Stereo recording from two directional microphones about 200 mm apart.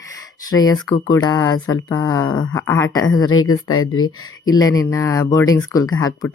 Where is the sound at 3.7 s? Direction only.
90° left.